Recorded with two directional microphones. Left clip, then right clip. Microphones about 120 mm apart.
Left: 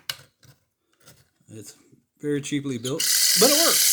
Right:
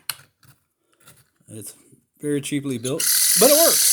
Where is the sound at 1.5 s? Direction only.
45° right (ahead or behind).